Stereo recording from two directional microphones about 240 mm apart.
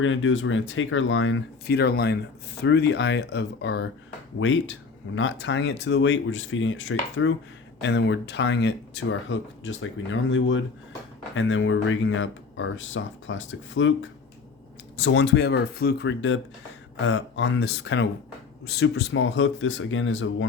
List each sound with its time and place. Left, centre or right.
0.0 s speech: left